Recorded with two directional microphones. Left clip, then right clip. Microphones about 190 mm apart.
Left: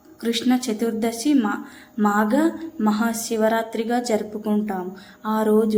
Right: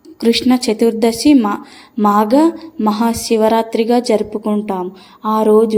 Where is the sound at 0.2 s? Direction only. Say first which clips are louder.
Right 9 dB; 30° right (ahead or behind).